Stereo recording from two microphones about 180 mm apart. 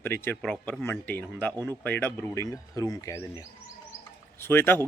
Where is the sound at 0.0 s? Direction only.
10° left (ahead or behind).